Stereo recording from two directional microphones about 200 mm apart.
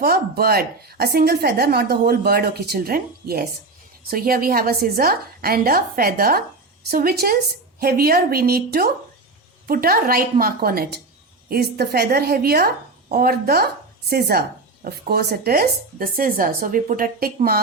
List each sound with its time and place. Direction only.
0.0 s speech: 50° right (ahead or behind)